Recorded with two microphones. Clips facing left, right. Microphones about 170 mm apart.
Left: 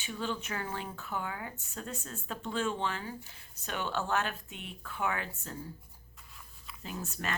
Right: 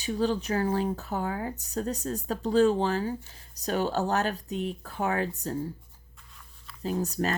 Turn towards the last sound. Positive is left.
turn(degrees=-40)  # may be behind; listen again after turning